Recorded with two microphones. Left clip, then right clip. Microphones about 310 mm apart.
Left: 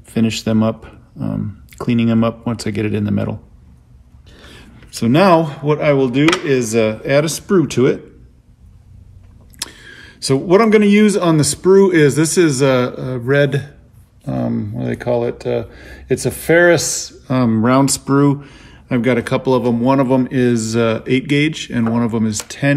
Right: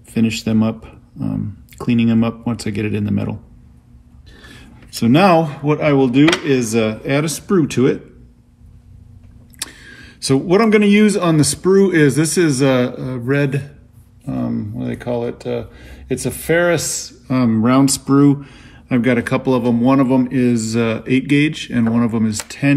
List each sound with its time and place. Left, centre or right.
0.1 s speech: centre
4.4 s speech: centre
9.6 s speech: centre